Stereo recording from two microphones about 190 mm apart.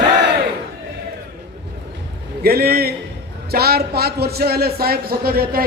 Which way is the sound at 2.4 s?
55° right (ahead or behind).